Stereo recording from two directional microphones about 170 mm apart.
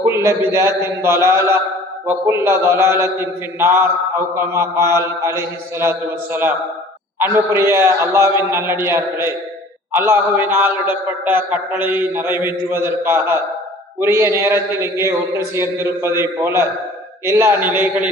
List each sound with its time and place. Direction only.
0.0 s a man's voice: 15° right (ahead or behind)